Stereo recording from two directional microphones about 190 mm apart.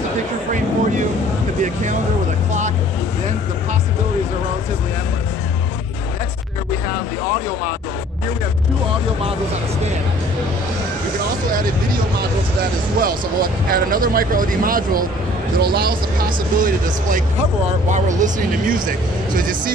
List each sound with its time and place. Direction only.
1.6 s speech: 40° right (ahead or behind)
13.0 s speech: 50° right (ahead or behind)